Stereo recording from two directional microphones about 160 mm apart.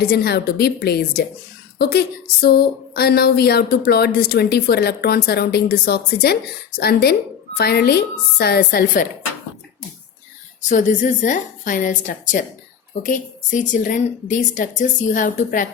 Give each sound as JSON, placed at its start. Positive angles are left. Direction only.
{"t": 0.0, "sound": "speech", "side_deg": 80}
{"t": 10.7, "sound": "a woman's voice", "side_deg": 50}